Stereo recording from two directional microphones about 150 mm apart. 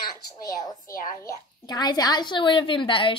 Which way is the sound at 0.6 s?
25° left (ahead or behind).